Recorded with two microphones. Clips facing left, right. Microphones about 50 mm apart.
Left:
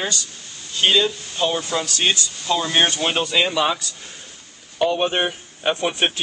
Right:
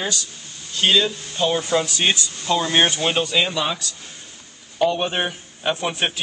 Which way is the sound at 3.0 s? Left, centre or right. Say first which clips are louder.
Even; centre.